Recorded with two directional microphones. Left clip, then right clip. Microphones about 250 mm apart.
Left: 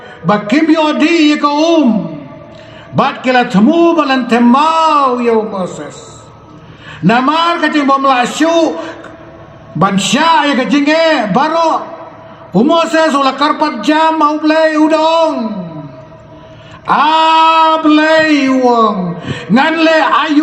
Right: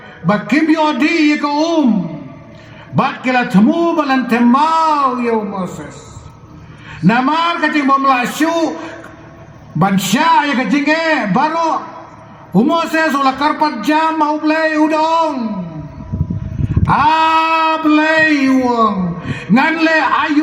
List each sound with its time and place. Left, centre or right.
0.3 s speech: right
2.9 s speech: right
7.1 s speech: right
9.7 s speech: right
16.8 s speech: right